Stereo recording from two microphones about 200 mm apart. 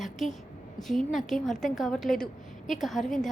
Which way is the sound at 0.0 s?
Centre (ahead or behind).